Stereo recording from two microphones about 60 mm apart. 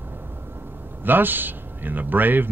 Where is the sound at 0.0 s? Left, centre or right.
Right.